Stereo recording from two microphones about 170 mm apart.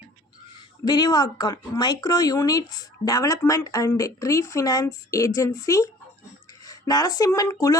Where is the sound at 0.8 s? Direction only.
25° left (ahead or behind).